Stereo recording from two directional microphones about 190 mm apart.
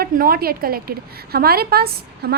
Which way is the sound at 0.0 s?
50° right (ahead or behind).